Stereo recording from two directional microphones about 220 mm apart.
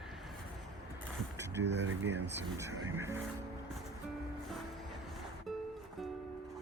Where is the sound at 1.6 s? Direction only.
50° right (ahead or behind).